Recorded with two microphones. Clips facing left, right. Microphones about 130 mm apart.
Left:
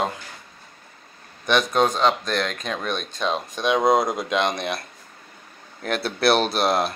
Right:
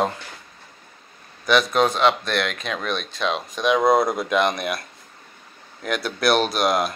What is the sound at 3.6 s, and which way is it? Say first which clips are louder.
Speech: right 1 dB; 20° left (ahead or behind).